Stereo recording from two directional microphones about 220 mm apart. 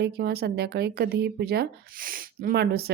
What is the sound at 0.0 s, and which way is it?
A woman's voice, 45° right (ahead or behind).